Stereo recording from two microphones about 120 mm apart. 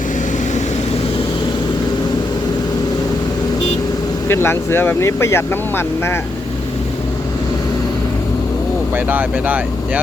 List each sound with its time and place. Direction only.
4.3 s speech: 20° left (ahead or behind)
9.0 s speech: 15° right (ahead or behind)